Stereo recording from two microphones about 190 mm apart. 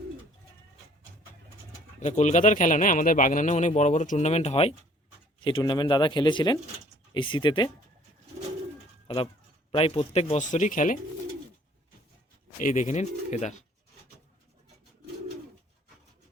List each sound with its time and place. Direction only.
2.0 s speech: 40° left (ahead or behind); by 7.7 s 25° left (ahead or behind)
9.0 s speech: 25° left (ahead or behind); by 10.9 s 45° left (ahead or behind)
12.5 s speech: 40° left (ahead or behind)